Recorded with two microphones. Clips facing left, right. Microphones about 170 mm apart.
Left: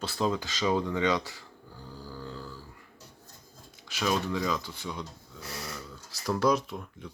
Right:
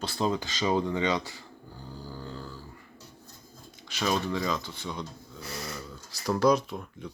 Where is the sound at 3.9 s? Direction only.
5° left (ahead or behind).